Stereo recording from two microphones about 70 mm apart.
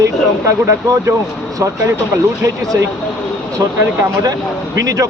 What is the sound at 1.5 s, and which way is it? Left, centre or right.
Speech, right.